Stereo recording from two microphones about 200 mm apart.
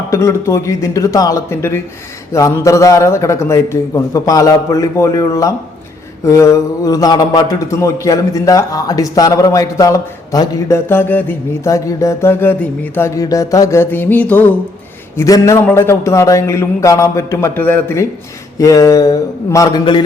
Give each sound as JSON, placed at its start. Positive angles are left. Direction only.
{"t": 0.1, "sound": "a man's voice", "side_deg": 15}